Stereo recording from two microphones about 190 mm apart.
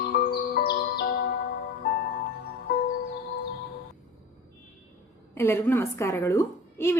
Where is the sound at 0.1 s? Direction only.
55° left (ahead or behind).